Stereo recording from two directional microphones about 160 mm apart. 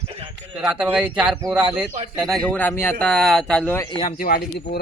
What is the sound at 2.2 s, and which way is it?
Speech, centre (ahead or behind).